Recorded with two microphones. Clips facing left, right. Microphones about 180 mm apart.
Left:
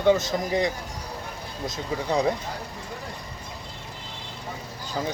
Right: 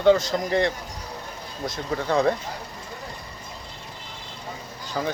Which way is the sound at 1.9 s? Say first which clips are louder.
Right 2 dB; 15° left (ahead or behind).